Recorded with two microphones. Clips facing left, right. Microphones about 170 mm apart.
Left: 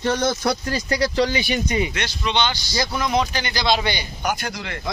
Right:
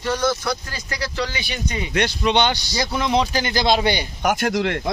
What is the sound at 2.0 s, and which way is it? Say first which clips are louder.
Speech: right 4 dB; 55° right (ahead or behind).